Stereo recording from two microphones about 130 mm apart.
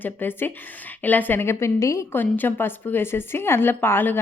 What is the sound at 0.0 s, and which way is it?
A woman's voice, 15° left (ahead or behind).